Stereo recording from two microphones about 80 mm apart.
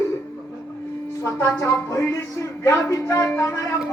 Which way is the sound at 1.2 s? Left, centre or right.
Left.